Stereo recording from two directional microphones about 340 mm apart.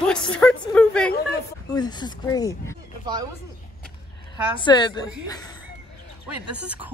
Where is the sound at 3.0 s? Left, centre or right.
Centre.